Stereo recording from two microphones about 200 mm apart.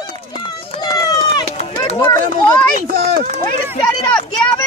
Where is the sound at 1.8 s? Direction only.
25° left (ahead or behind).